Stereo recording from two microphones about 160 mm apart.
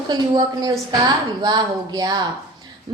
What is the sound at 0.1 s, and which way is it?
A woman's voice, 25° right (ahead or behind).